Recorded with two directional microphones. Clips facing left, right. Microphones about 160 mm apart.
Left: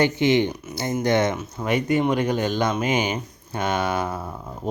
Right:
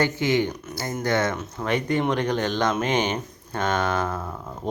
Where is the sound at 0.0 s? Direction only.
20° left (ahead or behind).